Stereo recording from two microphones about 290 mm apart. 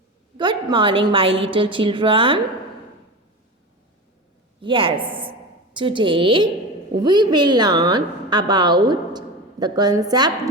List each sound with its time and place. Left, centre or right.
0.3 s a woman's voice: centre
4.6 s a woman's voice: centre